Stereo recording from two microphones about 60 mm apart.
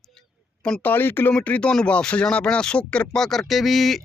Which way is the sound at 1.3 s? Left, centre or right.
Left.